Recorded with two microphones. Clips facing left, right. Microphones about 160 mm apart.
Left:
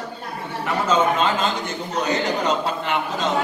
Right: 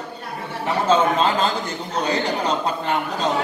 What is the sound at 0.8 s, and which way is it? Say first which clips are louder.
A man's voice: right 2 dB; 35° right (ahead or behind).